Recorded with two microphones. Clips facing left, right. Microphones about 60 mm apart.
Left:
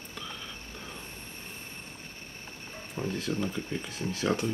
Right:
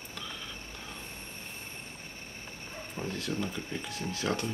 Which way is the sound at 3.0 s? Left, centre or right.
Centre.